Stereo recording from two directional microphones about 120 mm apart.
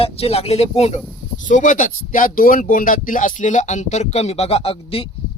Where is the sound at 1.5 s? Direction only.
90° left.